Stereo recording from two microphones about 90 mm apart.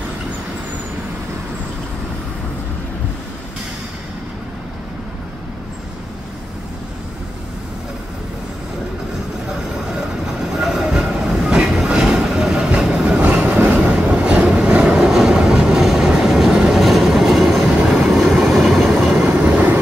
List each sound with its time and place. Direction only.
10.5 s train: centre (ahead or behind)
13.2 s train: 15° right (ahead or behind)